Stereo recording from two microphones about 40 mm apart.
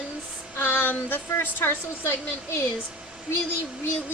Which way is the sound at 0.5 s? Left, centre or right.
Left.